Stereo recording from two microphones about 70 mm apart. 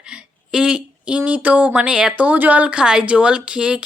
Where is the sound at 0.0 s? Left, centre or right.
Centre.